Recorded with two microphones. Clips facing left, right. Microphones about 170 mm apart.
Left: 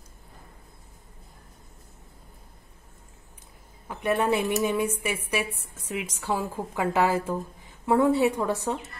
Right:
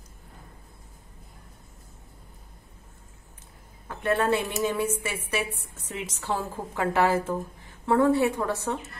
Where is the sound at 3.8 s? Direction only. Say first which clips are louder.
Even; 15° left (ahead or behind).